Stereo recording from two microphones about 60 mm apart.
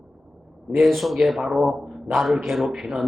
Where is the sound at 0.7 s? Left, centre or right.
Centre.